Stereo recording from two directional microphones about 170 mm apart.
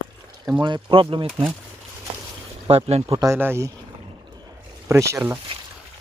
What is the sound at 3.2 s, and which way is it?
Speech, 15° right (ahead or behind).